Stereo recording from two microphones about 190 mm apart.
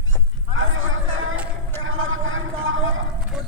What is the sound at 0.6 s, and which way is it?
Chatter, 90° right.